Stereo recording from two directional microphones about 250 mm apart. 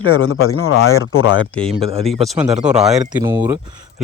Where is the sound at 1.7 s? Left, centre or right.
Right.